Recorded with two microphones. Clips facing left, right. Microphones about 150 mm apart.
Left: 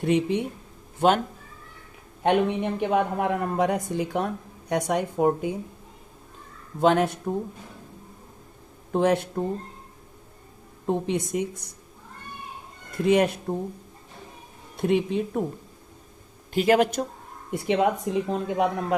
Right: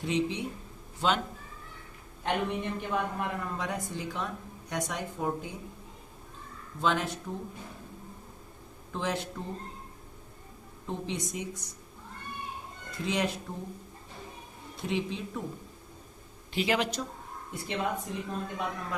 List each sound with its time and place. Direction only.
0.0 s a woman's voice: 60° left (ahead or behind)
2.2 s a woman's voice: 65° left (ahead or behind)
6.8 s a woman's voice: 60° left (ahead or behind)
8.9 s a woman's voice: 60° left (ahead or behind)
10.8 s a woman's voice: 55° left (ahead or behind)
13.1 s a woman's voice: 55° left (ahead or behind)
14.8 s a woman's voice: 55° left (ahead or behind)
16.5 s speech: 50° left (ahead or behind)
17.5 s speech: 65° left (ahead or behind)